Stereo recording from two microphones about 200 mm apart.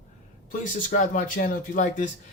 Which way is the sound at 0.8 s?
40° left (ahead or behind).